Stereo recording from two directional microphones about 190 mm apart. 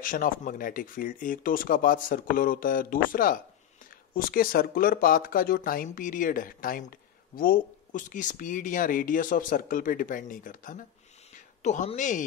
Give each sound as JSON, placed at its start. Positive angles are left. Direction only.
{"t": 0.0, "sound": "speech", "side_deg": 45}